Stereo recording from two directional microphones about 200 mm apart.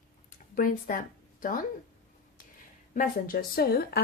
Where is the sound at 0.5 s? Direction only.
45° left (ahead or behind).